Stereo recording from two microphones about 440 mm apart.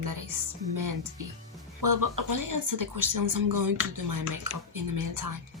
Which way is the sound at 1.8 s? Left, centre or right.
Right.